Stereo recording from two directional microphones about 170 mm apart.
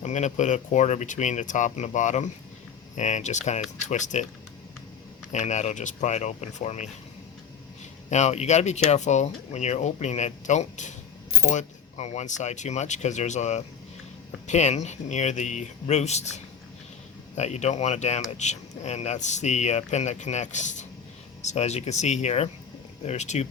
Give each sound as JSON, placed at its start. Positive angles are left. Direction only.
{"t": 0.0, "sound": "speech", "side_deg": 45}
{"t": 5.3, "sound": "speech", "side_deg": 45}
{"t": 8.1, "sound": "speech", "side_deg": 40}
{"t": 17.3, "sound": "speech", "side_deg": 40}